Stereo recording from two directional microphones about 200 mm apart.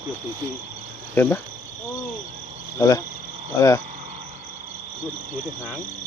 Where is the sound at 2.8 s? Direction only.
15° left (ahead or behind).